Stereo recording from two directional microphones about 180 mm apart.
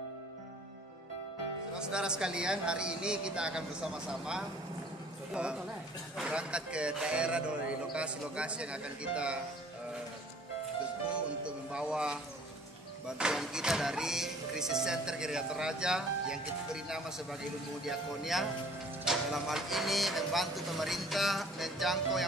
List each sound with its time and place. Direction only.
1.8 s speech: 5° right (ahead or behind)
11.1 s speech: 5° right (ahead or behind)
13.2 s speech: 5° right (ahead or behind)